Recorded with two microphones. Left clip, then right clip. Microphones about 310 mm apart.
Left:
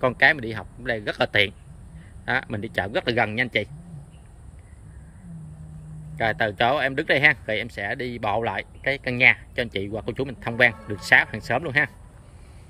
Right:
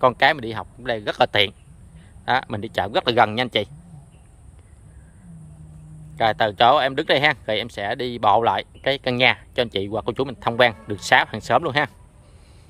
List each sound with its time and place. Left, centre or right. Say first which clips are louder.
0.0 s speech: right 2 dB; centre
6.1 s speech: right 4 dB; centre